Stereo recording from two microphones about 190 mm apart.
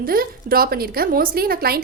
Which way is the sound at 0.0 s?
50° right (ahead or behind).